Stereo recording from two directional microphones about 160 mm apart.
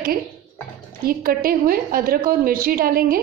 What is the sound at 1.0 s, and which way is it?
A woman's voice, 70° right (ahead or behind).